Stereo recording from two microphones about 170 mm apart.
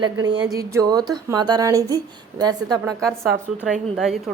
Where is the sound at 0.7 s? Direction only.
20° right (ahead or behind).